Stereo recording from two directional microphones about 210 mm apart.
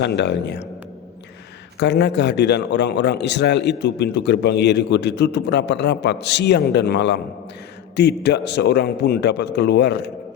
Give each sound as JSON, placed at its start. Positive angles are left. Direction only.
{"t": 0.0, "sound": "a man's voice", "side_deg": 55}
{"t": 1.8, "sound": "a man's voice", "side_deg": 55}